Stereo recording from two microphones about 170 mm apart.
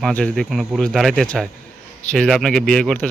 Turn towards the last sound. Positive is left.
turn(degrees=5)  # may be behind; listen again after turning